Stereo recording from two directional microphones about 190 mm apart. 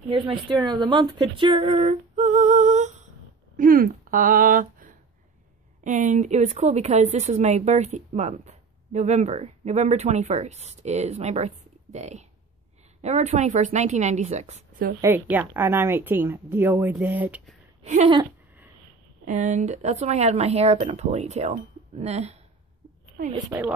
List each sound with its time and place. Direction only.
0.1 s a woman's voice: 25° right (ahead or behind)
0.8 s a sound: 25° right (ahead or behind); by 2.9 s 40° right (ahead or behind)
3.5 s speech: 45° right (ahead or behind)
15.0 s a woman's voice: 10° right (ahead or behind)
17.8 s speech: 35° right (ahead or behind)
19.2 s speech: 40° right (ahead or behind)
23.2 s a woman's voice: 50° right (ahead or behind)